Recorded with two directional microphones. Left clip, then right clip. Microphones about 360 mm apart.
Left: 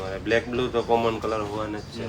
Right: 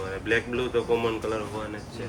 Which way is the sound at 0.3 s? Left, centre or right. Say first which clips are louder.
Left 2 dB; left.